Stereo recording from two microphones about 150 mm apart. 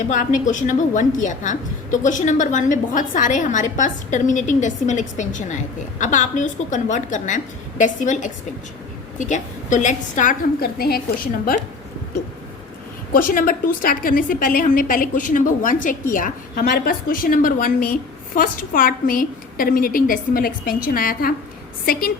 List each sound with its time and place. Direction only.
0.1 s a woman's voice: 60° left (ahead or behind); by 11.5 s 80° left
13.1 s a woman's voice: 65° left (ahead or behind)